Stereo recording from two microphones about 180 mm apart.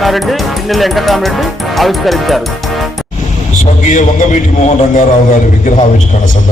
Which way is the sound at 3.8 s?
45° left (ahead or behind).